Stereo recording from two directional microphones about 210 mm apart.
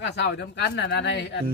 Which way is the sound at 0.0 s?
55° left (ahead or behind).